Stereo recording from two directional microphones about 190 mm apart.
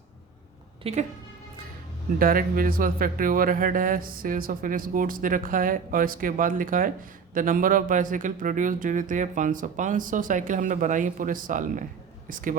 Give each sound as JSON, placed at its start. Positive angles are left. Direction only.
{"t": 0.8, "sound": "a woman's voice", "side_deg": -30}
{"t": 2.1, "sound": "speech", "side_deg": -50}